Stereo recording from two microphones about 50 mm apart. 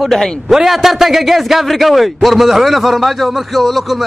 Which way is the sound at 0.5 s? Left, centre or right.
Centre.